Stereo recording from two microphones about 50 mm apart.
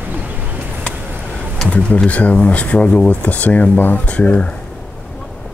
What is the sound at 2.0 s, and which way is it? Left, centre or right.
Speech, left.